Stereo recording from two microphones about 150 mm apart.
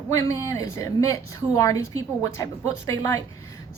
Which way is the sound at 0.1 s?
20° left (ahead or behind).